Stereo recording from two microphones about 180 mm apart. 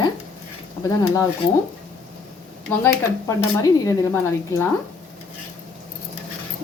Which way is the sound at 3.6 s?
15° left (ahead or behind).